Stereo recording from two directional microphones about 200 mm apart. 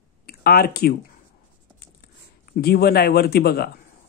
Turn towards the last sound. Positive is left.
turn(degrees=50)  # may be behind; listen again after turning